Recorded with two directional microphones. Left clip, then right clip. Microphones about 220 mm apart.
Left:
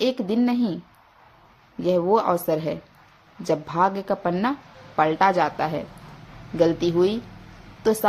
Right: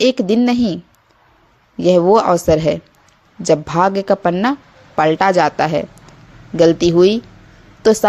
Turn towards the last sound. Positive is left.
turn(degrees=-30)  # may be behind; listen again after turning